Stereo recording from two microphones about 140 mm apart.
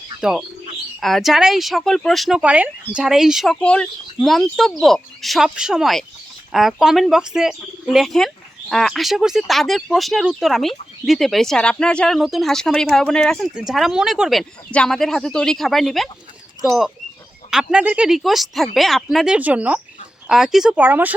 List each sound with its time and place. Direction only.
0.2 s speech: 5° right (ahead or behind)